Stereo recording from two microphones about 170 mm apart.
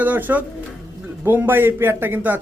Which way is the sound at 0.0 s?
10° right (ahead or behind).